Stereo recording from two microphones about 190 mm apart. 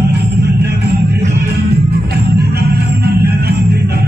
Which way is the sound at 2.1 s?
60° right (ahead or behind).